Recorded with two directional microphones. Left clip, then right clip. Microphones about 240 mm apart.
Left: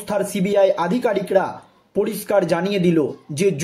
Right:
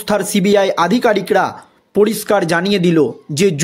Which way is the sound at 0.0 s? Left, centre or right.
Right.